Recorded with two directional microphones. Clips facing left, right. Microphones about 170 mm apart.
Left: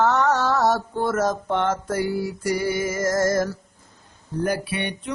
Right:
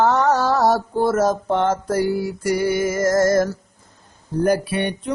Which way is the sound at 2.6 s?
60° right (ahead or behind).